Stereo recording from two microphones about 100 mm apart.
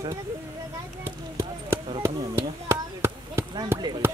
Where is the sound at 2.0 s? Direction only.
25° right (ahead or behind).